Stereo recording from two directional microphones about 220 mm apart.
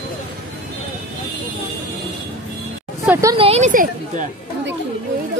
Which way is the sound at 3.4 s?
30° right (ahead or behind).